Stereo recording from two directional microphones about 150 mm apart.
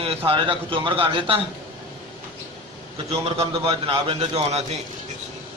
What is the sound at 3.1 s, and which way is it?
A man's voice, 40° right (ahead or behind).